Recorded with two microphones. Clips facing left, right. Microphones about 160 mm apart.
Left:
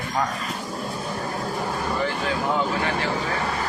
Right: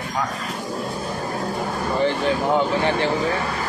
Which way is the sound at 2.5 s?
30° right (ahead or behind).